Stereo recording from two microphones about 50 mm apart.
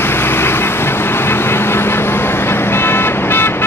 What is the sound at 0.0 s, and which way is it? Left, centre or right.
Vehicle, left.